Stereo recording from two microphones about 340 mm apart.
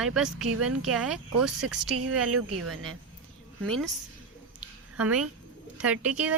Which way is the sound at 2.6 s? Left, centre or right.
Right.